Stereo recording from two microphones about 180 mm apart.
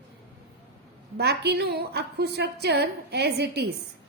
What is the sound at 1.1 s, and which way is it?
A woman's voice, 65° right (ahead or behind).